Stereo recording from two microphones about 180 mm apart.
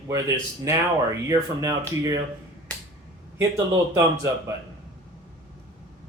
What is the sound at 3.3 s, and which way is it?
Speech, 15° right (ahead or behind).